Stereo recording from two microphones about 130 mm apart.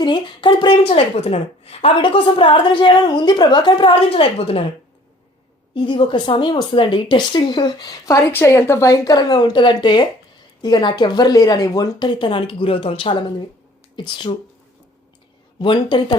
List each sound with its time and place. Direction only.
0.0 s speech: 35° left (ahead or behind)
0.9 s speech: 50° left (ahead or behind)
5.7 s speech: 40° left (ahead or behind)
15.5 s speech: 40° left (ahead or behind)